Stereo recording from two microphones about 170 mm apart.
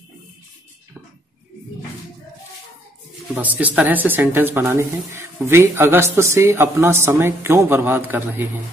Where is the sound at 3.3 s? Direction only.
10° right (ahead or behind).